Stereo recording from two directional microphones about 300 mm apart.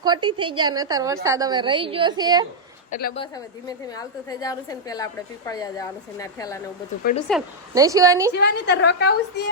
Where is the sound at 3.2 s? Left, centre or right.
Centre.